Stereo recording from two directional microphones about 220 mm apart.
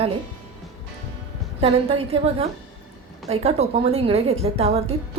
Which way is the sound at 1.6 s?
30° right (ahead or behind).